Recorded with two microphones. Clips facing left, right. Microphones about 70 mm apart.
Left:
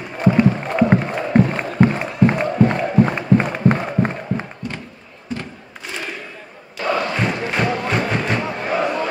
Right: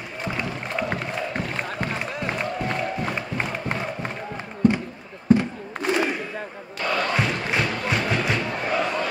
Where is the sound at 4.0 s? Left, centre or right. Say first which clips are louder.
Left 11 dB; left.